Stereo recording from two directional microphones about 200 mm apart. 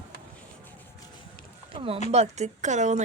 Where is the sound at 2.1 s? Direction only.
35° right (ahead or behind).